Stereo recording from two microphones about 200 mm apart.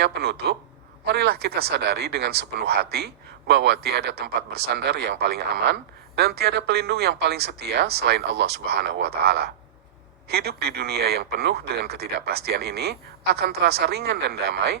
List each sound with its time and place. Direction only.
0.0 s speech: 55° right (ahead or behind)